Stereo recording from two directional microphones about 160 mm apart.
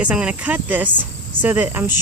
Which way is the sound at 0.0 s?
5° right (ahead or behind).